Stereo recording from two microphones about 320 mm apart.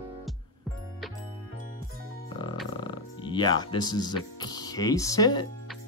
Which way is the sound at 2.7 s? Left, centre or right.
Centre.